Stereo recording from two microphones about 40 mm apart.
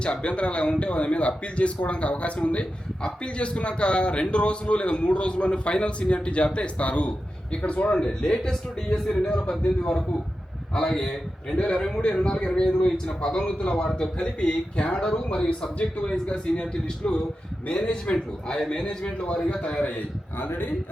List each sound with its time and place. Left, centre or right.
0.0 s a man's voice: left
7.9 s a man's voice: centre
9.0 s a man's voice: centre
10.9 s a man's voice: centre
11.5 s a man's voice: left
11.8 s a man's voice: centre
17.7 s a man's voice: left
18.1 s a man's voice: centre
20.4 s speech: left